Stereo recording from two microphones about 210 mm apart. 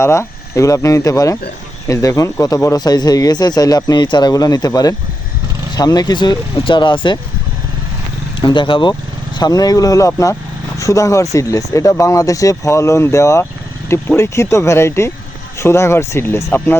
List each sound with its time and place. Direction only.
0.0 s speech: 15° left (ahead or behind)
8.4 s speech: 20° left (ahead or behind)